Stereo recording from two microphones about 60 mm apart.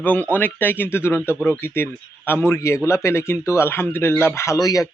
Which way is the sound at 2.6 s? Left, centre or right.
Left.